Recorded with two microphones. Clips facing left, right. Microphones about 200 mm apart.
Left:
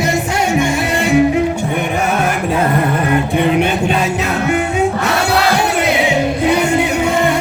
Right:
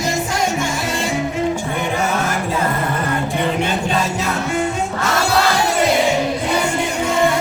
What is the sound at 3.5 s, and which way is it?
Music, 65° left (ahead or behind).